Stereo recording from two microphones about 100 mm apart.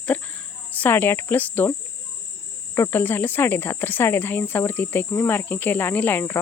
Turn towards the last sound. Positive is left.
turn(degrees=20)  # may be behind; listen again after turning